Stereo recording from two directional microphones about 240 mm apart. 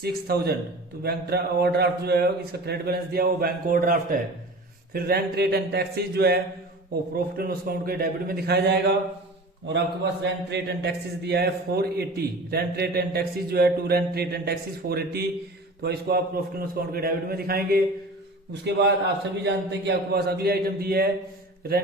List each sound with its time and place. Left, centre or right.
0.0 s a man's voice: right